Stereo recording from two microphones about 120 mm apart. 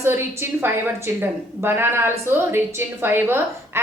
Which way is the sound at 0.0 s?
20° right (ahead or behind).